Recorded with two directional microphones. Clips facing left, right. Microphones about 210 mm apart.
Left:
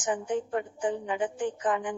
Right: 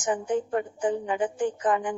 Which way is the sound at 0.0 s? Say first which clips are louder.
Right 3 dB; 40° right (ahead or behind).